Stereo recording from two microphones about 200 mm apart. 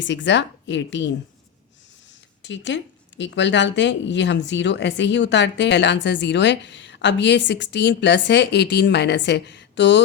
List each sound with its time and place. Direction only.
0.0 s speech: 65° left (ahead or behind)
2.4 s speech: 65° left (ahead or behind)